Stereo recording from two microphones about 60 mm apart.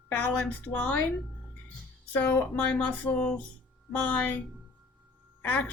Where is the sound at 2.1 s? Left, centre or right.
Left.